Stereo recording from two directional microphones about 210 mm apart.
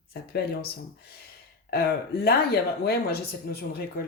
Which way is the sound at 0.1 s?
45° left (ahead or behind).